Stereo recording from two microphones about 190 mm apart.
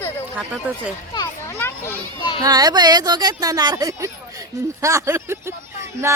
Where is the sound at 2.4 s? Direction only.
20° right (ahead or behind).